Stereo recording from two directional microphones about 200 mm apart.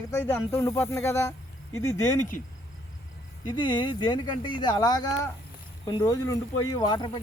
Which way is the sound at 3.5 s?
25° left (ahead or behind).